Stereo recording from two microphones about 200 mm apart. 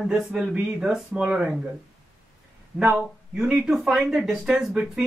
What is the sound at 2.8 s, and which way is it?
Speech, 10° right (ahead or behind).